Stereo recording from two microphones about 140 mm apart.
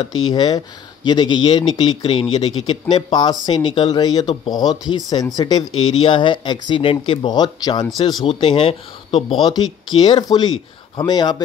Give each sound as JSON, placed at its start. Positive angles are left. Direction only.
{"t": 0.0, "sound": "speech", "side_deg": 30}